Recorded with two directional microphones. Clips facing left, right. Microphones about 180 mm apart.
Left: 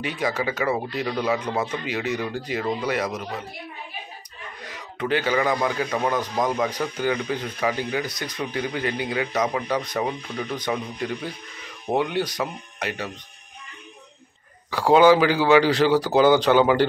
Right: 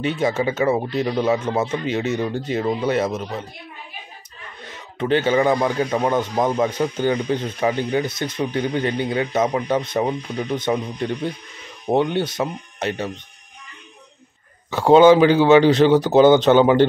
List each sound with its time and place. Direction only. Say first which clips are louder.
0.0 s speech: right 5 dB; 25° right (ahead or behind)
4.6 s speech: right 4 dB; 25° right (ahead or behind)
14.7 s speech: right 4 dB; 25° right (ahead or behind)